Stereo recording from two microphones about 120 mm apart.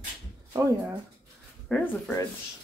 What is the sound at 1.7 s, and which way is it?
Speech, 5° left (ahead or behind).